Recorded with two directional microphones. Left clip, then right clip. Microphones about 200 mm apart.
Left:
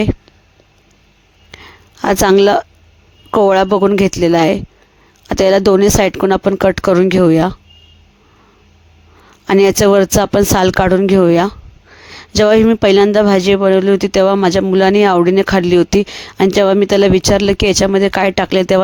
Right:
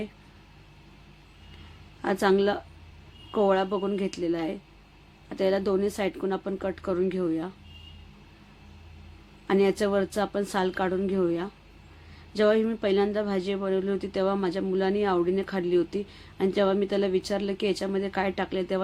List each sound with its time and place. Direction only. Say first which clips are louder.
2.0 s speech: left 14 dB; 55° left (ahead or behind)
9.5 s speech: left 15 dB; 55° left (ahead or behind)